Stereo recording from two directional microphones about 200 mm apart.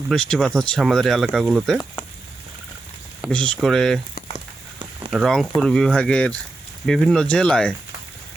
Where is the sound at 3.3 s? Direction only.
5° left (ahead or behind).